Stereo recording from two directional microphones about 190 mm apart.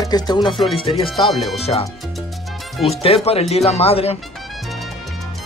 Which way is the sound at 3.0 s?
30° left (ahead or behind).